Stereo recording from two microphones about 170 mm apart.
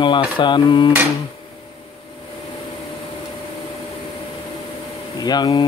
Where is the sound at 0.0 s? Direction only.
30° left (ahead or behind).